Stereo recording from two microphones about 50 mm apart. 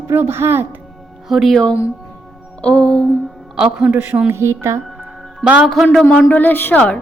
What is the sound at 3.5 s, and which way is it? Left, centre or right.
Speech, centre.